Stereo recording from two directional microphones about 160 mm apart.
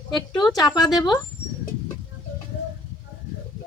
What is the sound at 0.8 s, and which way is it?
Speech, 25° left (ahead or behind).